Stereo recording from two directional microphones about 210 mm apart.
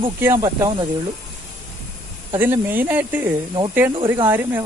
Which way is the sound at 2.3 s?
10° right (ahead or behind).